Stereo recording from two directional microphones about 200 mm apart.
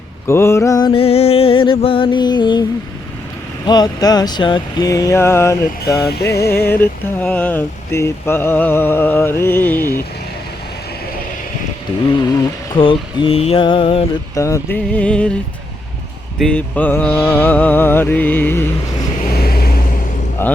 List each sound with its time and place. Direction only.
0.3 s speech: 15° left (ahead or behind)
0.9 s a sound: 30° left (ahead or behind)
3.7 s a sound: 20° left (ahead or behind)
6.0 s music: 55° left (ahead or behind)
6.3 s speech: 15° left (ahead or behind)
12.7 s a sound: 25° left (ahead or behind)
14.3 s speech: 15° left (ahead or behind)
16.4 s speech: 5° left (ahead or behind)
19.3 s vehicle: 50° left (ahead or behind)
20.4 s speech: 10° left (ahead or behind)